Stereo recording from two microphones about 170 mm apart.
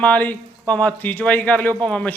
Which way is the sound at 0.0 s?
10° left (ahead or behind).